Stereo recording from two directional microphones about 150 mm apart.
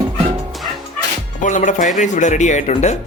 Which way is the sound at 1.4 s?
55° left (ahead or behind).